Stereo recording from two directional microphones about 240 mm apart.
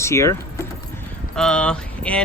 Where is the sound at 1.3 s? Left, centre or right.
Centre.